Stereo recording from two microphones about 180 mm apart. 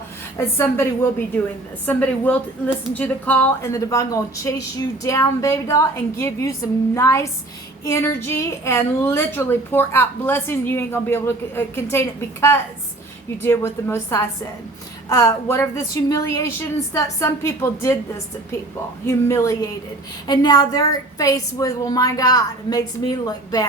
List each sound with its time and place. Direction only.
0.3 s a woman's voice: 15° left (ahead or behind)
19.0 s a woman's voice: 15° left (ahead or behind)